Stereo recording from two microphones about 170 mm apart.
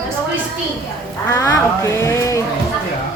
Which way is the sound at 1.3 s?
20° left (ahead or behind).